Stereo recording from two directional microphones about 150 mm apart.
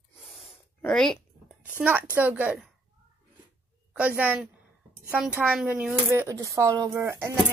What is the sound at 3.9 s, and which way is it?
A woman's voice, 10° right (ahead or behind).